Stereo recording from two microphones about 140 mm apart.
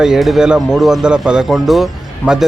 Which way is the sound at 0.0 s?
Centre (ahead or behind).